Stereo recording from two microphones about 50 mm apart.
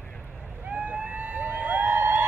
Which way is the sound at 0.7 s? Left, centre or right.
Right.